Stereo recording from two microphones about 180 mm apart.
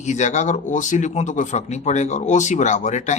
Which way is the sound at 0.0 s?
40° left (ahead or behind).